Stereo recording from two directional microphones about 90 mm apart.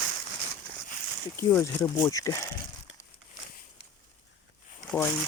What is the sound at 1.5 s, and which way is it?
Speech, 25° left (ahead or behind).